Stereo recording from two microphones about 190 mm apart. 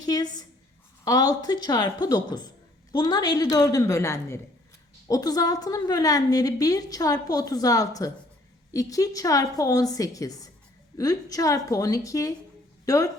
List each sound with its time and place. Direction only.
0.0 s a woman's voice: 20° left (ahead or behind)